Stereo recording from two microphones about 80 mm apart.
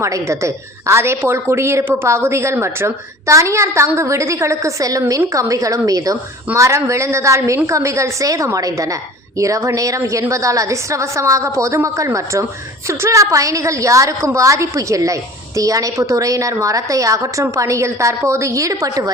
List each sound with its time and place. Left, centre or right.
0.0 s a woman's voice: right